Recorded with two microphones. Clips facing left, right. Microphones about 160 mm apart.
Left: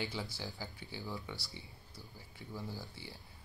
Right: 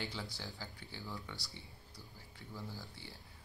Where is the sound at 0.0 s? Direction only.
15° left (ahead or behind).